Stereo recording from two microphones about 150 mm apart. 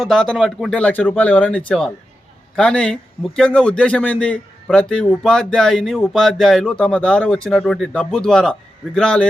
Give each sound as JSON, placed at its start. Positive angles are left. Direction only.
{"t": 0.0, "sound": "a man's voice", "side_deg": 0}